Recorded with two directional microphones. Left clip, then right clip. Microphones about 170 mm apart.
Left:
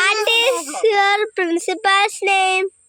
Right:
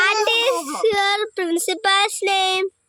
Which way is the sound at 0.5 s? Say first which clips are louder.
Even; 40° right (ahead or behind).